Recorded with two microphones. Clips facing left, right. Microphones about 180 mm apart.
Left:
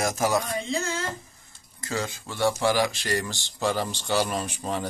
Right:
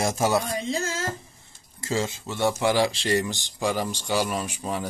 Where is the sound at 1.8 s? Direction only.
25° right (ahead or behind).